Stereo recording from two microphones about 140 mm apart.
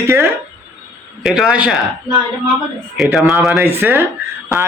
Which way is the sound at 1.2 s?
5° right (ahead or behind).